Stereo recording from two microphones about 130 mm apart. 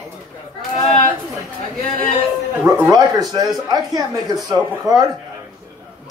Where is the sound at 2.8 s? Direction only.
30° right (ahead or behind).